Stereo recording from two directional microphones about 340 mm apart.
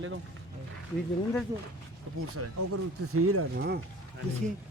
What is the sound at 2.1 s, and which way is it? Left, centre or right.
Speech, right.